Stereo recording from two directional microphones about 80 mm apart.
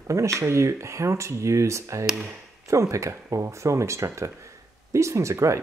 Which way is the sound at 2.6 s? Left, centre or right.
Right.